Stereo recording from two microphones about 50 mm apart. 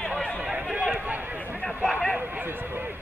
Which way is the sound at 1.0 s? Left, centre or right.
Right.